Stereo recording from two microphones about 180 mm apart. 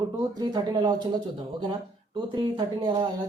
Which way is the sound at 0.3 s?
25° right (ahead or behind).